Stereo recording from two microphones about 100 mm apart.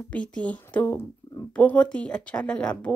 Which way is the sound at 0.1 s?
10° left (ahead or behind).